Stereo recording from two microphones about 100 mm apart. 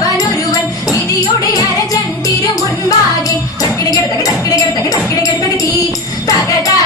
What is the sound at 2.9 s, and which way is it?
Music, 35° left (ahead or behind).